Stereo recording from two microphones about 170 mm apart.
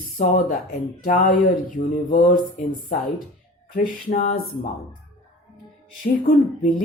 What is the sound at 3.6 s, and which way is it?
Speech, 55° left (ahead or behind).